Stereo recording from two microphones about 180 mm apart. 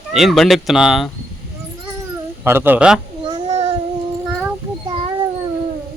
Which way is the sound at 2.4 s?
10° right (ahead or behind).